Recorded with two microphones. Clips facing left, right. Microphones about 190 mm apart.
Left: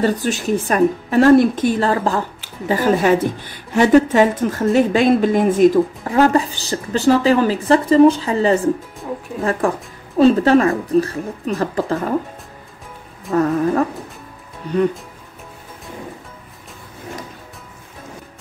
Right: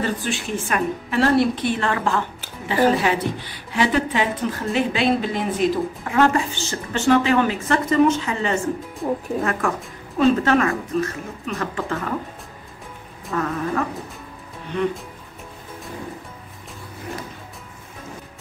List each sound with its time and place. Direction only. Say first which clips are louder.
0.0 s a woman's voice: left 6 dB; 40° left (ahead or behind)
13.3 s a woman's voice: left 8 dB; 35° left (ahead or behind)